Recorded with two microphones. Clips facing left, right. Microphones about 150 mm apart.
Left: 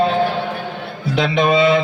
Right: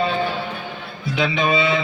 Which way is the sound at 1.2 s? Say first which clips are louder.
Left 5 dB; 50° left (ahead or behind).